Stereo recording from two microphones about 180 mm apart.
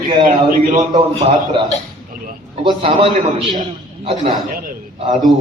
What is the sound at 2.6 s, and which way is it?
A man's voice, 30° right (ahead or behind).